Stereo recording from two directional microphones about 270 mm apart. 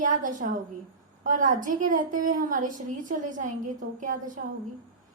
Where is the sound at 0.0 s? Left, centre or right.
Right.